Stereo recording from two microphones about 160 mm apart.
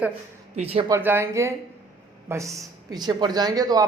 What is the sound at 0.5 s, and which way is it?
Speech, 40° right (ahead or behind).